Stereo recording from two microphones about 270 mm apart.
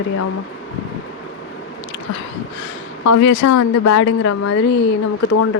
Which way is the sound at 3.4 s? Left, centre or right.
Left.